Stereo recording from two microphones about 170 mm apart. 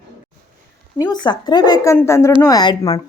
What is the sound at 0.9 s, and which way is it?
A woman's voice, 20° left (ahead or behind).